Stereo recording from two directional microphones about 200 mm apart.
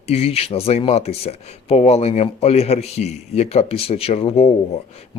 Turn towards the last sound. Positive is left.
turn(degrees=30)  # may be behind; listen again after turning